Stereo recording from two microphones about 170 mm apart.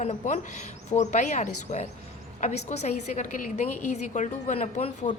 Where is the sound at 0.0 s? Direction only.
40° left (ahead or behind).